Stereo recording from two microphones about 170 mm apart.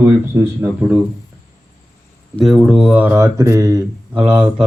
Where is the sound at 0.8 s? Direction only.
5° right (ahead or behind).